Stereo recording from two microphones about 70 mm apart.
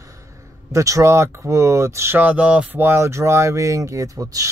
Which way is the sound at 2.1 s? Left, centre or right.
Right.